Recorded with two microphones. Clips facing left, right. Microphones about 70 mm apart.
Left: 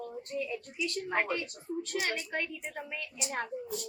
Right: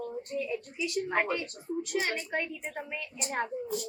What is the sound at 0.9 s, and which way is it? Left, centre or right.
Speech, centre.